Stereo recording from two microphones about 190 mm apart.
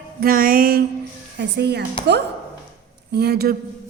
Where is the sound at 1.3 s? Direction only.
60° right (ahead or behind).